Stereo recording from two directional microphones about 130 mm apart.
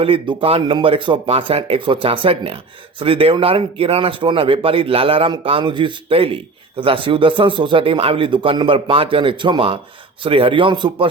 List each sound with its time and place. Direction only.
0.0 s a man's voice: 40° right (ahead or behind)